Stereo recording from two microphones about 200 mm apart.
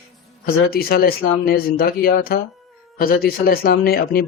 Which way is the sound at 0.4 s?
50° left (ahead or behind).